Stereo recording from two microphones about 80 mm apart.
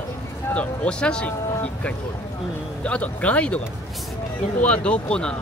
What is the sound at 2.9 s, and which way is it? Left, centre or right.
Speech, centre.